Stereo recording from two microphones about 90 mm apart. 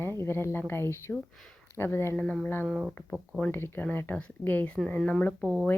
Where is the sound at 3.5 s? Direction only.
25° left (ahead or behind).